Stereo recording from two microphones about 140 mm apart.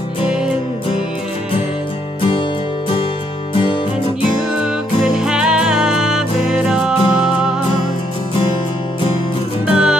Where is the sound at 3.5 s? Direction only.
40° left (ahead or behind).